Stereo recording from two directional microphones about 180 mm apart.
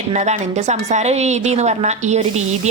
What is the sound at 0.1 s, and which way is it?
Sizzle, 40° right (ahead or behind).